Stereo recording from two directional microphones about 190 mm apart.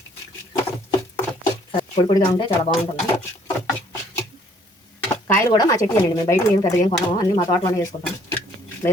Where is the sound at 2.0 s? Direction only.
25° left (ahead or behind).